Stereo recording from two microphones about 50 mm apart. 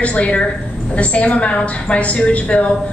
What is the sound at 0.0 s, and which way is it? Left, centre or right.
A woman's voice, left.